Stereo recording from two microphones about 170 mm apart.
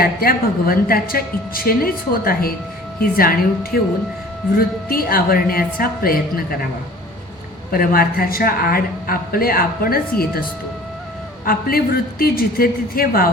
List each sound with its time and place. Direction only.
0.0 s a woman's voice: 60° left (ahead or behind)
7.7 s a woman's voice: 60° left (ahead or behind)
11.4 s a woman's voice: 60° left (ahead or behind)